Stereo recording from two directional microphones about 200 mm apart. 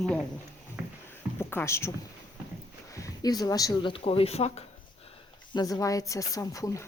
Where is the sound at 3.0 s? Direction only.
20° left (ahead or behind).